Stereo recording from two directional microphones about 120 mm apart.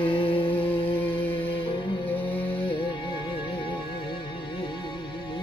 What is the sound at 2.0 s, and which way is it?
Music, 15° left (ahead or behind).